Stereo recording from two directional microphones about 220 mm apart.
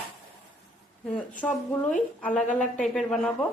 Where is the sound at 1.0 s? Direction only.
5° left (ahead or behind).